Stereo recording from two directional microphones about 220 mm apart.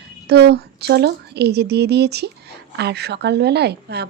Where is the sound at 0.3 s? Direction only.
50° right (ahead or behind).